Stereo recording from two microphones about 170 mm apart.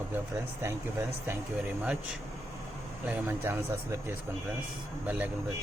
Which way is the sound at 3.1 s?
10° right (ahead or behind).